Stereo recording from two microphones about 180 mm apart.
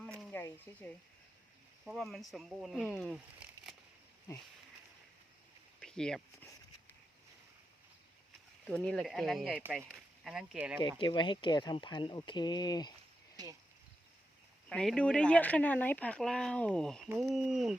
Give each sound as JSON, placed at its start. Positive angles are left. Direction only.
{"t": 0.0, "sound": "a sound", "side_deg": 5}
{"t": 1.8, "sound": "speech", "side_deg": 0}
{"t": 5.8, "sound": "a sound", "side_deg": 5}
{"t": 8.6, "sound": "speech", "side_deg": 5}
{"t": 10.8, "sound": "speech", "side_deg": 25}
{"t": 13.3, "sound": "speech", "side_deg": -20}
{"t": 14.7, "sound": "speech", "side_deg": 5}